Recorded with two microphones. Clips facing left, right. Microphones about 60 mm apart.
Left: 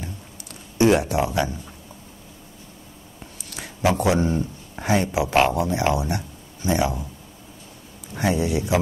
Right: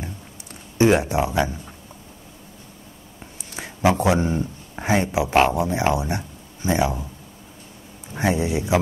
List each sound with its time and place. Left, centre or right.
0.7 s speech: right
3.4 s speech: right
8.1 s speech: right